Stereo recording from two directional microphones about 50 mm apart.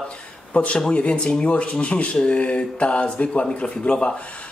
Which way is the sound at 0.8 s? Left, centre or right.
Centre.